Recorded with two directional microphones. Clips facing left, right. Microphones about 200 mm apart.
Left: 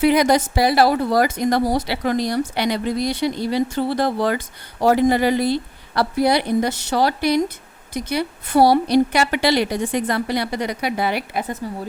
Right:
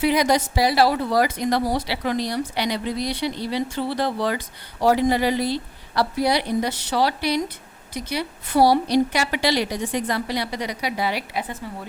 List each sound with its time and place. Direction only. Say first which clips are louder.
0.0 s a woman's voice: left 4 dB; 55° left (ahead or behind)